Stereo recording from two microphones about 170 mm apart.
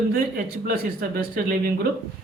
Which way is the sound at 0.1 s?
60° right (ahead or behind).